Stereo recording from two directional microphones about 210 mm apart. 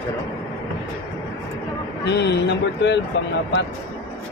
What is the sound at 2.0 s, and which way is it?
Speech, 55° left (ahead or behind).